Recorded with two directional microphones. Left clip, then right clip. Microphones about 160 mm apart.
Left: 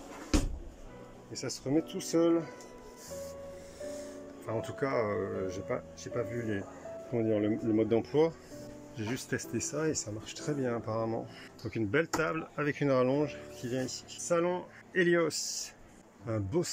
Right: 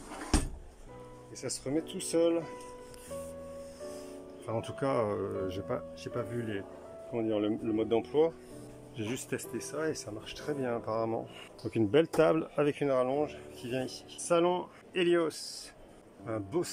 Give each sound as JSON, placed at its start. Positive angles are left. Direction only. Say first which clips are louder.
{"t": 1.3, "sound": "speech", "louder": "left 2 dB", "side_deg": 0}
{"t": 4.5, "sound": "speech", "louder": "right 1 dB", "side_deg": -10}
{"t": 8.9, "sound": "speech", "louder": "even", "side_deg": -10}
{"t": 9.6, "sound": "speech", "louder": "left 2 dB", "side_deg": 5}
{"t": 11.7, "sound": "speech", "louder": "right 4 dB", "side_deg": -20}
{"t": 12.8, "sound": "speech", "louder": "left 1 dB", "side_deg": 5}
{"t": 14.2, "sound": "speech", "louder": "right 2 dB", "side_deg": -15}
{"t": 15.0, "sound": "speech", "louder": "left 1 dB", "side_deg": -5}
{"t": 15.4, "sound": "speech", "louder": "left 5 dB", "side_deg": 20}
{"t": 16.3, "sound": "speech", "louder": "left 1 dB", "side_deg": 0}